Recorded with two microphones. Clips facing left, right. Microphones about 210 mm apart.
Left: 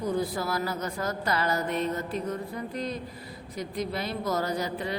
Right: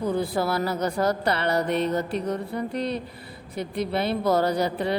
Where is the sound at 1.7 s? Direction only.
70° right (ahead or behind).